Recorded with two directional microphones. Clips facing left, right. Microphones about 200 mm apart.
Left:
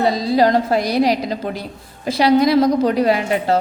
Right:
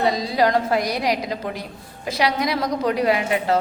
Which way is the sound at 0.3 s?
30° left (ahead or behind).